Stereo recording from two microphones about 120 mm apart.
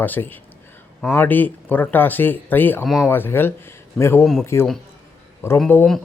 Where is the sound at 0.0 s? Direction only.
15° left (ahead or behind).